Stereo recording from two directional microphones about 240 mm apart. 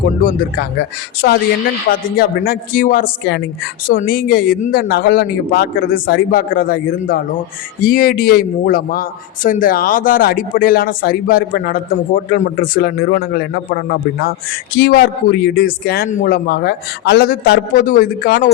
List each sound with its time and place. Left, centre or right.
0.2 s a man's voice: left
1.2 s a man's voice: left
14.8 s a man's voice: left